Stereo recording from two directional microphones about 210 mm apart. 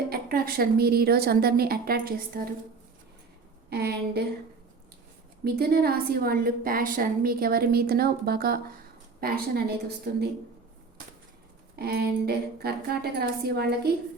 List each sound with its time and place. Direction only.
0.1 s a woman's voice: 45° right (ahead or behind)
3.7 s a woman's voice: 50° right (ahead or behind)
5.5 s a woman's voice: 50° right (ahead or behind)
11.8 s a woman's voice: 50° right (ahead or behind)